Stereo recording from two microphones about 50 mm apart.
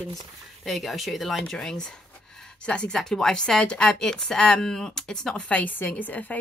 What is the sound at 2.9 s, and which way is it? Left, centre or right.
A woman's voice, centre.